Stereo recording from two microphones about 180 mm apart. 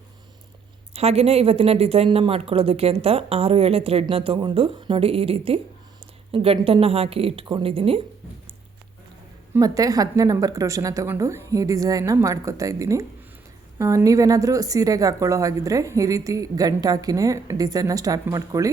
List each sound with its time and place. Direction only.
0.9 s a woman's voice: 35° right (ahead or behind)
9.5 s speech: 20° right (ahead or behind)